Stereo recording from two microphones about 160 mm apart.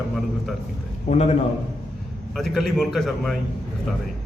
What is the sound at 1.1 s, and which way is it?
Speech, 40° left (ahead or behind).